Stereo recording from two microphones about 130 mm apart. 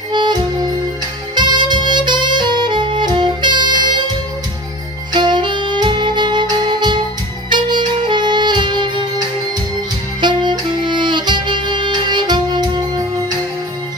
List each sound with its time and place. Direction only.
0.1 s music: 35° right (ahead or behind)
1.3 s saxophone: 35° right (ahead or behind)
5.1 s music: 35° right (ahead or behind)
10.2 s music: 35° right (ahead or behind)